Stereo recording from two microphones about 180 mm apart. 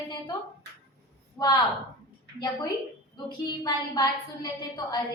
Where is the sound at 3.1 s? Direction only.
25° left (ahead or behind).